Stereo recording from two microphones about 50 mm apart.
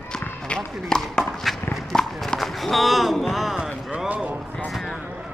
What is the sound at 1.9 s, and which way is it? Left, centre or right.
Run, centre.